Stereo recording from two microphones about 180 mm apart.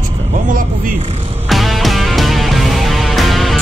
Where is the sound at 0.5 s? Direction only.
50° right (ahead or behind).